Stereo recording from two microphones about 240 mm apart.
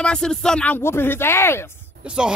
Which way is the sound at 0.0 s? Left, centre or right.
Centre.